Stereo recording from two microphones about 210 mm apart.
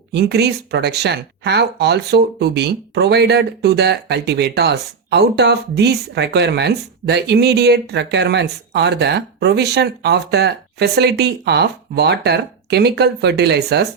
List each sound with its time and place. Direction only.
0.1 s speech: 50° right (ahead or behind)